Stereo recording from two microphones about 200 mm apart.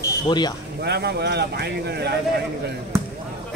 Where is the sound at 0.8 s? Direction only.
55° right (ahead or behind).